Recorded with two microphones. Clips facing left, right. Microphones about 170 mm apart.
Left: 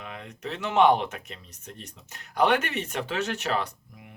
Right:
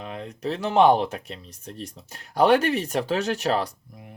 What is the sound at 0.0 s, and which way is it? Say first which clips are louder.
Speech: right 6 dB; 35° right (ahead or behind).